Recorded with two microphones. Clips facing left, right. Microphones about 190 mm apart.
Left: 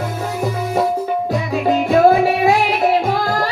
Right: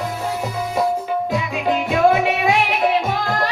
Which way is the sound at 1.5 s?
35° left (ahead or behind).